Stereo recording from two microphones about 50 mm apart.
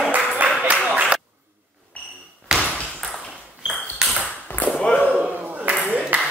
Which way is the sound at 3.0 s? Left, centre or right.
Centre.